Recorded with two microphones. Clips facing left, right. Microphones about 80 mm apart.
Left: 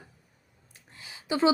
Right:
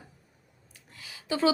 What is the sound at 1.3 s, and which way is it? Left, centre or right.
Speech, centre.